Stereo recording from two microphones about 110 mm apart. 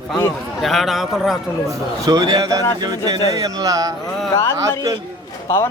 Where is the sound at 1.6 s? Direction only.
35° right (ahead or behind).